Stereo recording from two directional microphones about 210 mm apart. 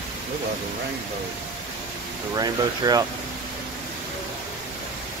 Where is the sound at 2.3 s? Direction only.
20° right (ahead or behind).